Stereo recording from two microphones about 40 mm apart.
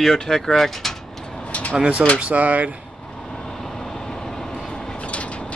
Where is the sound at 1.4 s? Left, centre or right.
Left.